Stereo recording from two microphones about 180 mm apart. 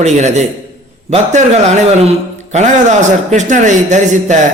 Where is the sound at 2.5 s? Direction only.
40° right (ahead or behind).